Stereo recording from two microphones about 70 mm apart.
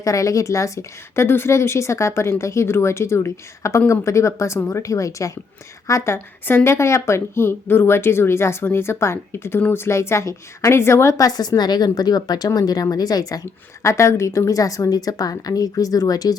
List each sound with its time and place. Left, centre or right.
0.0 s speech: left
13.8 s a woman's voice: left